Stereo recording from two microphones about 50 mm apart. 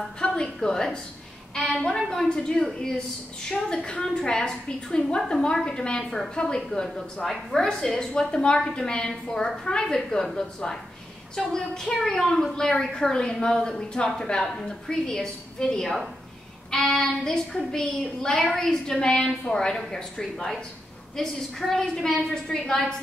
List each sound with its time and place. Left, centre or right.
0.2 s a woman's voice: centre
16.7 s child singing: centre
17.0 s a woman's voice: centre